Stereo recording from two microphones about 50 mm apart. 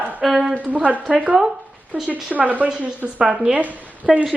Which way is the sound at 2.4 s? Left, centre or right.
Right.